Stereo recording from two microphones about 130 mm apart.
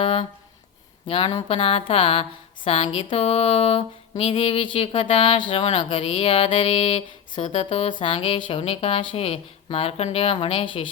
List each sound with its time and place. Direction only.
0.0 s speech: 45° left (ahead or behind)